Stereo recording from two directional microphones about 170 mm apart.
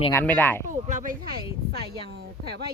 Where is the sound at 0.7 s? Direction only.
50° right (ahead or behind).